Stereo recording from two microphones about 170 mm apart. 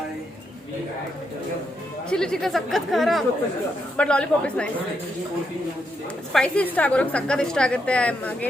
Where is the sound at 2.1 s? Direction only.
5° left (ahead or behind).